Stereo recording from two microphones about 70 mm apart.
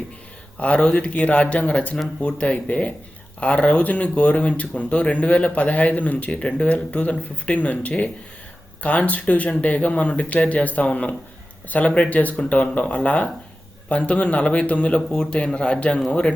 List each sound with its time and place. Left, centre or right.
0.6 s a man's voice: centre